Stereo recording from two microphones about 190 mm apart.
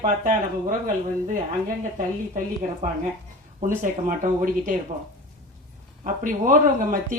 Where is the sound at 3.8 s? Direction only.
40° right (ahead or behind).